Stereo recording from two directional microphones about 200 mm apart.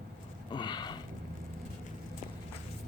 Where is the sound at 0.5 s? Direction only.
20° left (ahead or behind).